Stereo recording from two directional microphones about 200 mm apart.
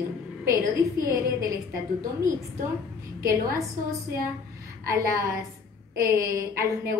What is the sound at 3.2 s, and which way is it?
Speech, 15° right (ahead or behind).